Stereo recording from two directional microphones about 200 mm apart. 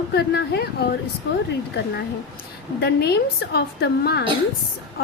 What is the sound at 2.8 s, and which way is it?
A woman's voice, 55° left (ahead or behind).